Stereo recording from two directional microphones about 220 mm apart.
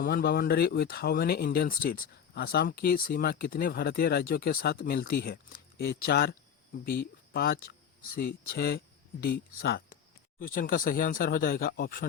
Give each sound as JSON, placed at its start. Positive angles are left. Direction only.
{"t": 0.0, "sound": "speech", "side_deg": 45}
{"t": 7.3, "sound": "speech", "side_deg": 45}